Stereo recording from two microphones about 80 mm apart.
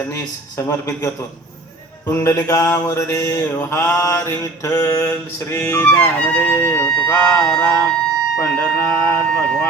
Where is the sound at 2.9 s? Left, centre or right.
Left.